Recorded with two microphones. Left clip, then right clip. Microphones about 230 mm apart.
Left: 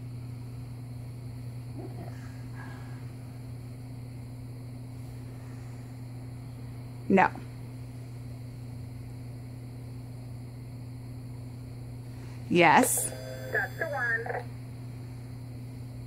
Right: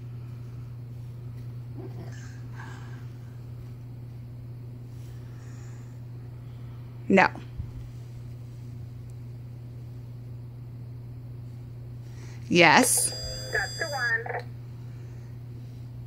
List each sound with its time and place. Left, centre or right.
7.1 s speech: centre
12.4 s a woman's voice: centre
13.5 s speech: right